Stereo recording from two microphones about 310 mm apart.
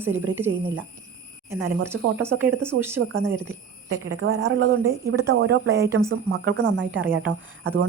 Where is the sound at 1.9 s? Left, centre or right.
Right.